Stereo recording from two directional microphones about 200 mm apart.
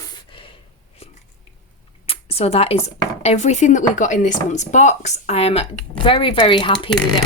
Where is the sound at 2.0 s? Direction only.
30° left (ahead or behind).